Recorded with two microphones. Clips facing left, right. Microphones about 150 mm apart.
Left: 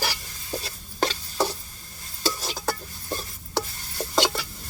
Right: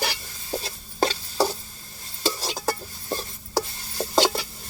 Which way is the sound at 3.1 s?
30° right (ahead or behind).